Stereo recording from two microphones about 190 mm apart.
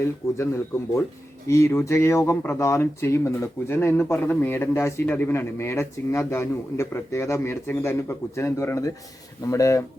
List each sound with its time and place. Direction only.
0.0 s speech: 15° left (ahead or behind)